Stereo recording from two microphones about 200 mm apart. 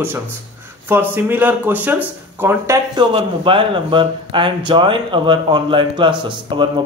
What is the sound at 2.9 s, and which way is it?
A man's voice, 25° right (ahead or behind).